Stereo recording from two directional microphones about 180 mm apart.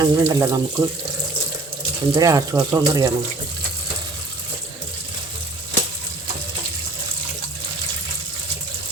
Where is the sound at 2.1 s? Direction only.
20° right (ahead or behind).